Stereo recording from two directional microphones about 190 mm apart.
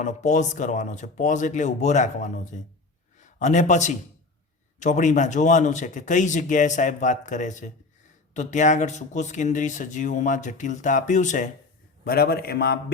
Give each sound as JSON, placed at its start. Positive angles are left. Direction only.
{"t": 0.0, "sound": "a man's voice", "side_deg": 40}
{"t": 12.0, "sound": "a man's voice", "side_deg": 55}